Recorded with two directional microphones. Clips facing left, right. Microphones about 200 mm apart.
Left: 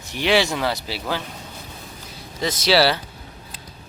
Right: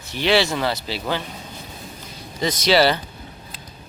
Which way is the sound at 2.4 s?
5° left (ahead or behind).